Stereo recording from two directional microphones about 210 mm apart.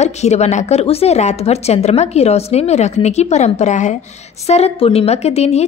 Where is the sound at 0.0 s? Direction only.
30° left (ahead or behind).